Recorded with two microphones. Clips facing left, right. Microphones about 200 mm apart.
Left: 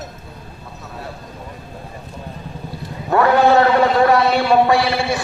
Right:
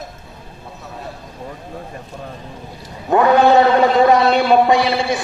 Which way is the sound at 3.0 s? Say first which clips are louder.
Right 1 dB; 20° right (ahead or behind).